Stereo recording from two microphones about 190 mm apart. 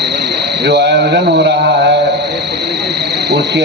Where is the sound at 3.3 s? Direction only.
65° right (ahead or behind).